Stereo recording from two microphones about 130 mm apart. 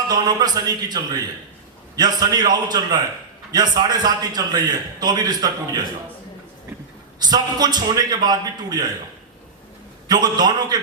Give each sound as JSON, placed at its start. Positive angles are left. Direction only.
{"t": 0.1, "sound": "a man's voice", "side_deg": -30}
{"t": 7.2, "sound": "a man's voice", "side_deg": -30}
{"t": 10.1, "sound": "a man's voice", "side_deg": -30}